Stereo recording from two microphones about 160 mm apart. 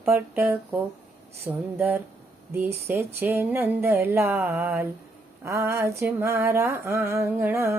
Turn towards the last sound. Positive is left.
turn(degrees=-15)  # may be behind; listen again after turning